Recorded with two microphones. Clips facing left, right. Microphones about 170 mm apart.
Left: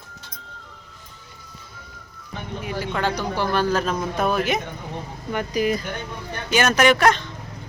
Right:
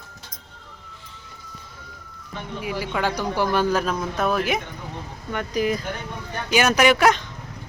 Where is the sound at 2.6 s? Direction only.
10° right (ahead or behind).